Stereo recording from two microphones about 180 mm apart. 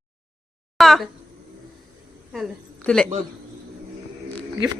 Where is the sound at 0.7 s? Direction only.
Centre (ahead or behind).